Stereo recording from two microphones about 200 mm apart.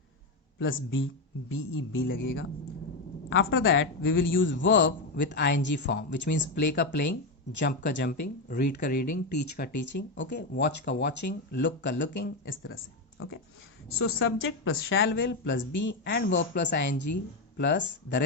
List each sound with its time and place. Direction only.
0.6 s a man's voice: 70° left (ahead or behind)
3.2 s speech: 75° left (ahead or behind)
7.7 s speech: 40° left (ahead or behind)
7.9 s speech: 55° left (ahead or behind)
10.5 s speech: 60° left (ahead or behind)